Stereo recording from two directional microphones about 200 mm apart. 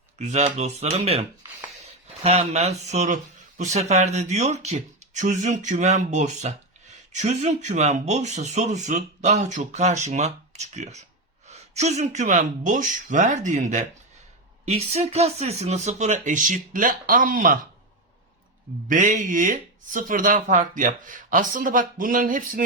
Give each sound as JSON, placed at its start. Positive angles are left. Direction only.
{"t": 0.2, "sound": "speech", "side_deg": -35}
{"t": 2.2, "sound": "speech", "side_deg": -30}
{"t": 18.9, "sound": "speech", "side_deg": -40}